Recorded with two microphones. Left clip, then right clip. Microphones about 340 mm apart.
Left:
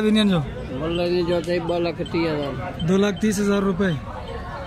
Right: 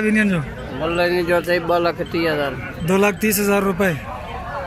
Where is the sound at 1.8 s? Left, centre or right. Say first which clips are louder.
Right 4 dB; centre.